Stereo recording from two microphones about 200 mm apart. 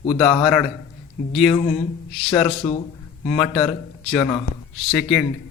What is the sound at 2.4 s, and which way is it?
Speech, 30° left (ahead or behind).